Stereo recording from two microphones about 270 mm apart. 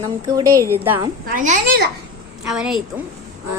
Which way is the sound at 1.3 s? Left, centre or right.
Right.